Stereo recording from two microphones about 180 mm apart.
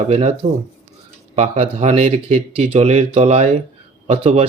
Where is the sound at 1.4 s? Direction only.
35° right (ahead or behind).